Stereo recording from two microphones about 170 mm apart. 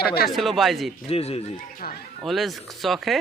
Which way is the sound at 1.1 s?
35° left (ahead or behind).